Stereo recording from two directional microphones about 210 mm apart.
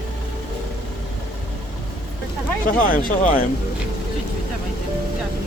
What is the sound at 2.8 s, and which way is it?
Speech, 40° left (ahead or behind).